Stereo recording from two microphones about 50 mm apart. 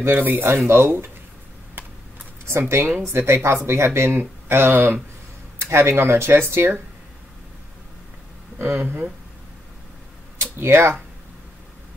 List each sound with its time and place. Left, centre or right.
0.2 s speech: right
0.7 s speech: right
2.7 s speech: right
3.1 s speech: right
8.5 s speech: right
10.6 s speech: right